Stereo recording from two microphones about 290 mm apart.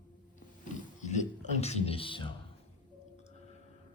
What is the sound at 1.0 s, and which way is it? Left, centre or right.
A man's voice, left.